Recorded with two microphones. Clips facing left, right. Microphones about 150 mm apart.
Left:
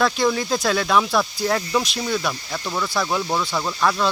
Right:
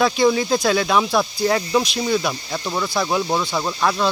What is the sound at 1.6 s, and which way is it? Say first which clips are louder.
Speech: right 3 dB; 15° right (ahead or behind).